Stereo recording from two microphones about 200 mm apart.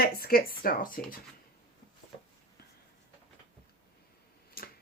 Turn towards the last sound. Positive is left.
turn(degrees=50)  # may be behind; listen again after turning